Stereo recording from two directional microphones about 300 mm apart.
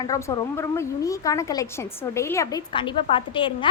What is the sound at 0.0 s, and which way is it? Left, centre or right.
A woman's voice, centre.